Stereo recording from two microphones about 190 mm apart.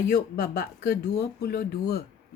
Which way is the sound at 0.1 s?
55° left (ahead or behind).